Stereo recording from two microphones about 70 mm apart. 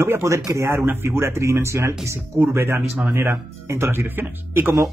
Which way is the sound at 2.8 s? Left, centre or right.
Right.